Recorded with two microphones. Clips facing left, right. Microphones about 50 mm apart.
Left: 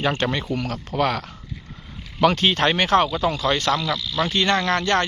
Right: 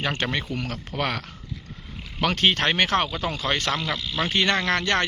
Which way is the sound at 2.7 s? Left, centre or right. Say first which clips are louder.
Left 4 dB; centre.